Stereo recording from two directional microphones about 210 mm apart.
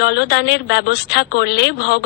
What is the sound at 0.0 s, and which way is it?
A woman's voice, 50° left (ahead or behind).